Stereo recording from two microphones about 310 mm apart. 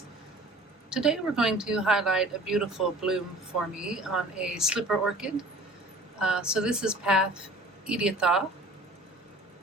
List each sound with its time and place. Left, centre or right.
0.9 s speech: centre